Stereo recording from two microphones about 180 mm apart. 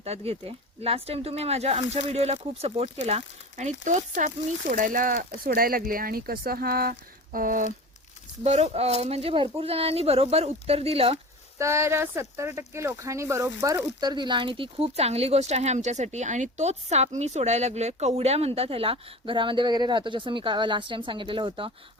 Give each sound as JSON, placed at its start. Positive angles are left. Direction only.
{"t": 0.0, "sound": "speech", "side_deg": -35}
{"t": 8.4, "sound": "speech", "side_deg": -35}
{"t": 11.5, "sound": "speech", "side_deg": -15}